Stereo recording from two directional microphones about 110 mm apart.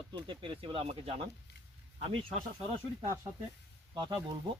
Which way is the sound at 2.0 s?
70° right (ahead or behind).